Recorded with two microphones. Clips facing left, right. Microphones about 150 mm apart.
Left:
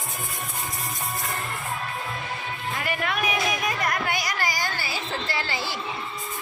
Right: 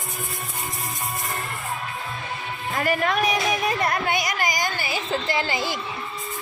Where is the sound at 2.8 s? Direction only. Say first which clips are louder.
Right 7 dB; 40° right (ahead or behind); by 5.8 s 15° right (ahead or behind).